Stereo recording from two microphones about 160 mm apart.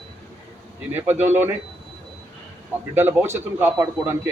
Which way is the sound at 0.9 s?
10° right (ahead or behind).